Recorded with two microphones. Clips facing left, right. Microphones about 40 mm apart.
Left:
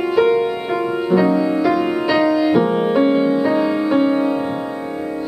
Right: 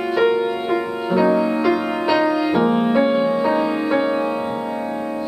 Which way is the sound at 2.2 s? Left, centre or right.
Centre.